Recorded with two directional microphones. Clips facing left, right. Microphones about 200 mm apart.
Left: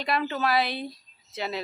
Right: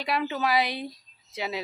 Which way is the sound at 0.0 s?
10° right (ahead or behind).